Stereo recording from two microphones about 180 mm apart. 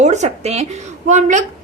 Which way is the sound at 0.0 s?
40° right (ahead or behind).